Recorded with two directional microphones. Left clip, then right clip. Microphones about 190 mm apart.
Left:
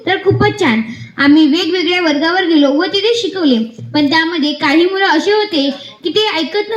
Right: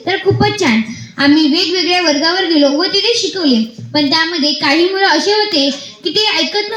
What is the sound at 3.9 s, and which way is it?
A woman's voice, 50° right (ahead or behind).